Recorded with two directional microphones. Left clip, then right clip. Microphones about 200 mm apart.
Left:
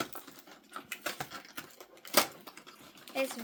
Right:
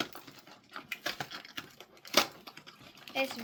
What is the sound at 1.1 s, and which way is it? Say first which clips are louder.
Coin: right 1 dB; centre (ahead or behind).